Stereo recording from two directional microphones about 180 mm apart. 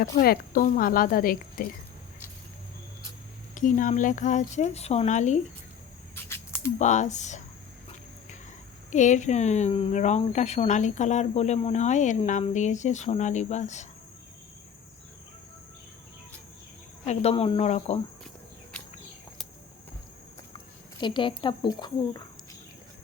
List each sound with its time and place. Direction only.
0.0 s speech: 55° left (ahead or behind)
3.5 s speech: 45° left (ahead or behind)
6.7 s speech: 40° left (ahead or behind)
8.9 s speech: 40° left (ahead or behind)
17.1 s speech: 35° left (ahead or behind)
21.0 s speech: 25° left (ahead or behind)